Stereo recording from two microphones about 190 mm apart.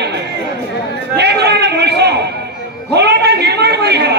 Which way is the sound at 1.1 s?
60° right (ahead or behind).